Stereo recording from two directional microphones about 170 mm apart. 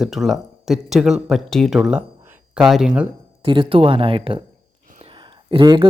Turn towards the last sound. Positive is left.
turn(degrees=-30)  # may be behind; listen again after turning